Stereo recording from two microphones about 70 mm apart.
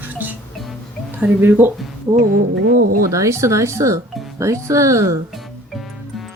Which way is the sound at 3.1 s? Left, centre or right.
Right.